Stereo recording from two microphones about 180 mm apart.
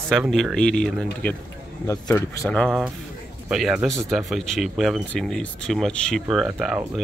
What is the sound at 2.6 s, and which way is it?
Speech, centre (ahead or behind).